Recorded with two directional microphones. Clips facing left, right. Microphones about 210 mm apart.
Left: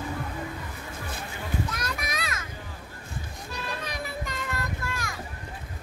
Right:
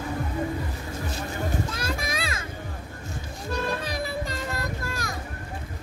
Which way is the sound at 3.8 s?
35° right (ahead or behind).